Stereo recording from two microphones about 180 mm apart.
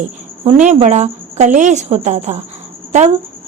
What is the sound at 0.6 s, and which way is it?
Speech, 40° right (ahead or behind).